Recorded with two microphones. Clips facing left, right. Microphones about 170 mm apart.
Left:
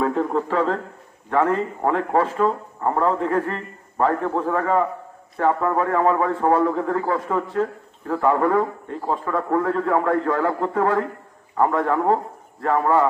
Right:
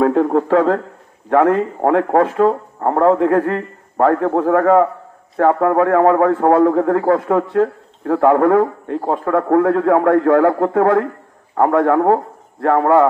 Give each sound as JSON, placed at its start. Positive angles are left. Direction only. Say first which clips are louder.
{"t": 0.0, "sound": "a man's voice", "louder": "right 7 dB", "side_deg": -60}